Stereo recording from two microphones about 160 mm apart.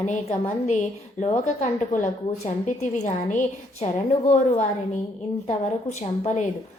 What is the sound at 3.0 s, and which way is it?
Speech, 50° left (ahead or behind).